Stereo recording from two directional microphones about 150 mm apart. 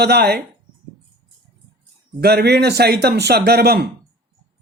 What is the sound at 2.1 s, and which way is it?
Speech, 90° right.